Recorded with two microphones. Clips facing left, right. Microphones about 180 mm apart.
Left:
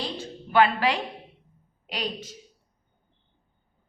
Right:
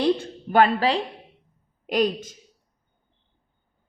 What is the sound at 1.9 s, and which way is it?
Speech, 50° right (ahead or behind).